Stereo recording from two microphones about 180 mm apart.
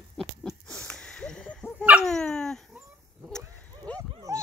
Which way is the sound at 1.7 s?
5° right (ahead or behind).